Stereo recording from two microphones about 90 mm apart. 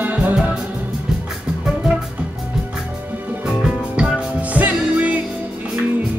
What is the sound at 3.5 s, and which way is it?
Music, 5° right (ahead or behind).